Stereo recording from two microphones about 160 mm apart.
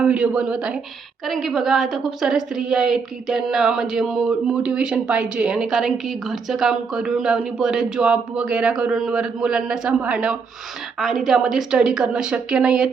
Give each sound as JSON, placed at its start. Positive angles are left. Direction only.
{"t": 0.0, "sound": "a woman's voice", "side_deg": -5}